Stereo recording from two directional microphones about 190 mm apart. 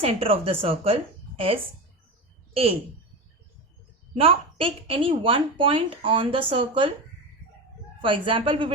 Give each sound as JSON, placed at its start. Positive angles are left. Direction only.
{"t": 0.0, "sound": "a woman's voice", "side_deg": -30}
{"t": 4.1, "sound": "a woman's voice", "side_deg": -30}
{"t": 8.0, "sound": "a woman's voice", "side_deg": -25}